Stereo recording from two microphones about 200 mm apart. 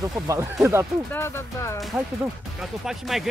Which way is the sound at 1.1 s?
15° left (ahead or behind).